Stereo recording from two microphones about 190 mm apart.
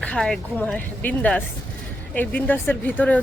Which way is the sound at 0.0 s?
5° left (ahead or behind).